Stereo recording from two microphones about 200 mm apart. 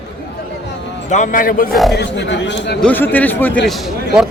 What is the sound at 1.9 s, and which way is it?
Speech, 60° left (ahead or behind).